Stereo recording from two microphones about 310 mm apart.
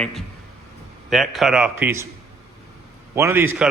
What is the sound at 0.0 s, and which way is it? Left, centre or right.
Speech, centre.